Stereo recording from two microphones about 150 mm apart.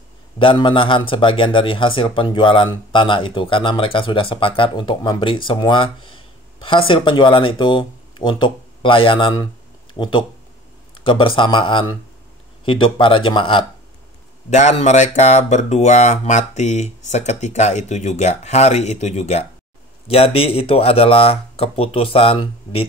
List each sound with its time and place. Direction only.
0.4 s a man's voice: 35° left (ahead or behind)
14.5 s a man's voice: 50° left (ahead or behind)